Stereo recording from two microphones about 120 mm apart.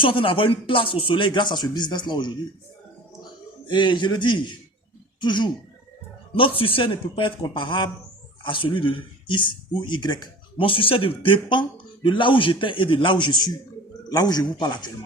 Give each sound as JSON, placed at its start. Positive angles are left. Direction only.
{"t": 0.0, "sound": "speech", "side_deg": 50}
{"t": 3.7, "sound": "a man's voice", "side_deg": 40}
{"t": 6.7, "sound": "a man's voice", "side_deg": 45}